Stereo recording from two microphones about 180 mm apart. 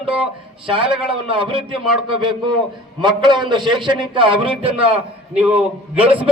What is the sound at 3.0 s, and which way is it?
A man's voice, 25° right (ahead or behind).